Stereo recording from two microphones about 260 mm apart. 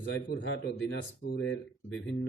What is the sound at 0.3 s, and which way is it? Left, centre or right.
A man's voice, left.